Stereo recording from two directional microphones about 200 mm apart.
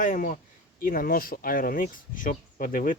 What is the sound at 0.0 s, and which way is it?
Speech, 40° left (ahead or behind).